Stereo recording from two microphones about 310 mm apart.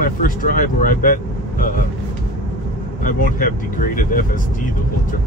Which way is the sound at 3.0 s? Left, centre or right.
Left.